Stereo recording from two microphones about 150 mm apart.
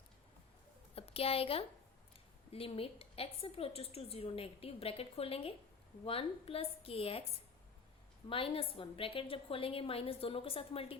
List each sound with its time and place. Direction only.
0.9 s a woman's voice: 40° left (ahead or behind)
8.3 s a woman's voice: 35° left (ahead or behind)